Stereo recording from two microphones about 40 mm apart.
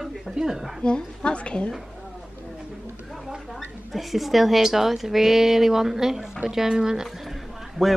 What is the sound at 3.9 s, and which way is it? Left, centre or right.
A woman's voice, centre.